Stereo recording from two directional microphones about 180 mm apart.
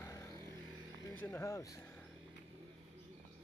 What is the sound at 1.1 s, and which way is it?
Speech, 10° left (ahead or behind).